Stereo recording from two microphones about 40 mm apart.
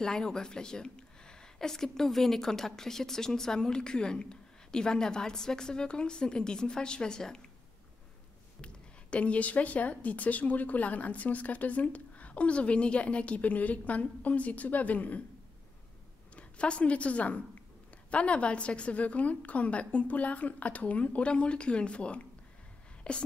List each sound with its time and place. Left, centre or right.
0.0 s speech: centre
8.5 s speech: left
16.3 s a woman's voice: left